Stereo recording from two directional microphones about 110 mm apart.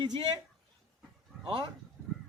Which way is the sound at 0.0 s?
40° right (ahead or behind).